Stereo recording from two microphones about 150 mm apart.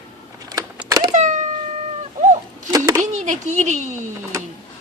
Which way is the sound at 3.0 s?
50° right (ahead or behind).